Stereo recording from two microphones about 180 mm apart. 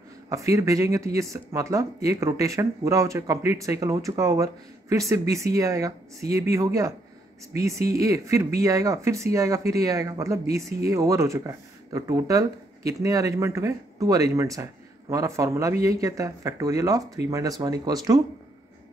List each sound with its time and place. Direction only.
0.3 s speech: 20° right (ahead or behind)